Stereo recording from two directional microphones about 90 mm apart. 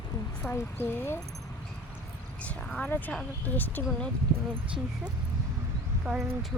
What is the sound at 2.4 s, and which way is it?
Speech, 15° left (ahead or behind).